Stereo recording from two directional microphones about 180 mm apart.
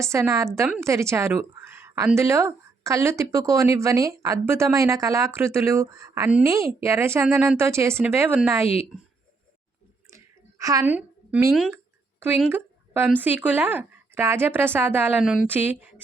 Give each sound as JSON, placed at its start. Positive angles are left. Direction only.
{"t": 0.0, "sound": "a woman's voice", "side_deg": -15}
{"t": 10.1, "sound": "a sound", "side_deg": -15}
{"t": 12.5, "sound": "a woman's voice", "side_deg": -10}